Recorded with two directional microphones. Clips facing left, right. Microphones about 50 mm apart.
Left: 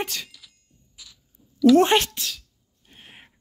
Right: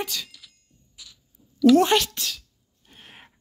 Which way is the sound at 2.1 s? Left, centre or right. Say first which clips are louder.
Right 1 dB; centre.